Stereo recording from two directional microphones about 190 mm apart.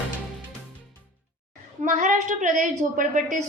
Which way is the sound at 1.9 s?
40° right (ahead or behind).